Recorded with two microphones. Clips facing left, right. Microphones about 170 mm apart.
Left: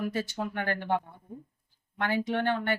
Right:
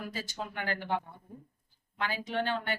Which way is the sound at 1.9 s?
60° left (ahead or behind).